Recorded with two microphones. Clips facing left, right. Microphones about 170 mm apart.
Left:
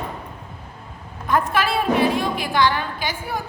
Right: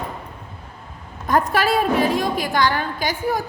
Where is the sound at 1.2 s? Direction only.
40° right (ahead or behind).